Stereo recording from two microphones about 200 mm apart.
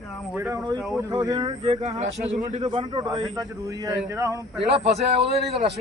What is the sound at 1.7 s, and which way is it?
Speech, 35° right (ahead or behind).